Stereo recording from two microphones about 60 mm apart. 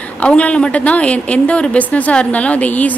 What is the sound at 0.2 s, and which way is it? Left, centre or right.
A woman's voice, centre.